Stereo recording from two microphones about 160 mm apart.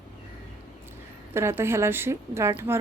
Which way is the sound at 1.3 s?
15° right (ahead or behind).